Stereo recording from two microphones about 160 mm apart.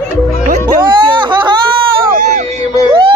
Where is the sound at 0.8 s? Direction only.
30° right (ahead or behind).